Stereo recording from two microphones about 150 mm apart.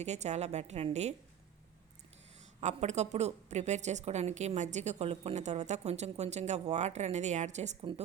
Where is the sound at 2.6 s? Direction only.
50° right (ahead or behind).